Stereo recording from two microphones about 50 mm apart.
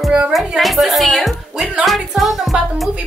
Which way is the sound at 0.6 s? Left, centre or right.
Centre.